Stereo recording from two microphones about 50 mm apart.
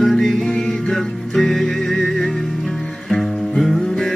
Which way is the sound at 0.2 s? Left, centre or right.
Centre.